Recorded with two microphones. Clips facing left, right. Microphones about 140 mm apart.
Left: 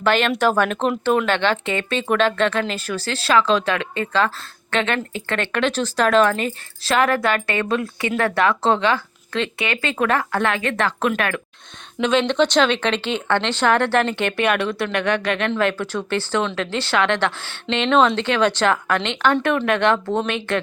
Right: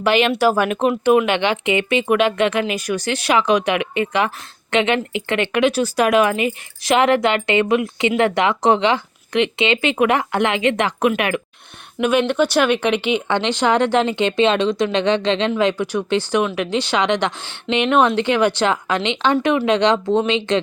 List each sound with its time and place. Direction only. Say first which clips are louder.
0.0 s speech: right 2 dB; 10° right (ahead or behind)